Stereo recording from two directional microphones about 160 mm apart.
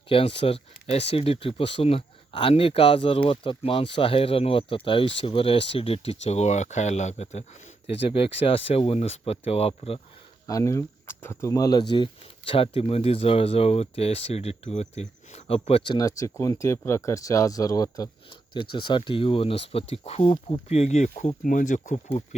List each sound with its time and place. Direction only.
0.1 s speech: 35° left (ahead or behind)
10.4 s speech: 20° left (ahead or behind); by 22.4 s 45° left (ahead or behind)